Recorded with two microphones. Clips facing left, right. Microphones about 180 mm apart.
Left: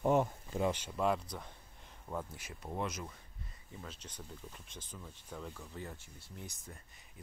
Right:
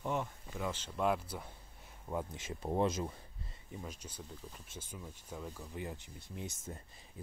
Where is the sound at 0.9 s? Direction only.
Centre (ahead or behind).